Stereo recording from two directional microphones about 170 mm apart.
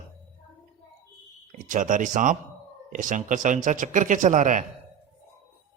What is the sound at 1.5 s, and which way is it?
A man's voice, 50° right (ahead or behind).